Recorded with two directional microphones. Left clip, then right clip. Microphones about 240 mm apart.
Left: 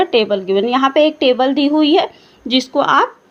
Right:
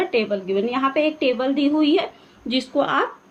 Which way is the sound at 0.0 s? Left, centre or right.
Left.